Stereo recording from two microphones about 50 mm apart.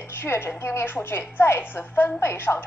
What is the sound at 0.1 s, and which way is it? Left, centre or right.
A woman's voice, left.